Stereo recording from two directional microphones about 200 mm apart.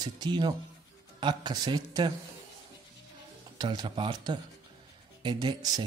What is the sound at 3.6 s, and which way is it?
Speech, 20° right (ahead or behind).